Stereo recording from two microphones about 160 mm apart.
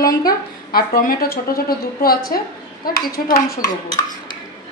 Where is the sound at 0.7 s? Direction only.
65° left (ahead or behind).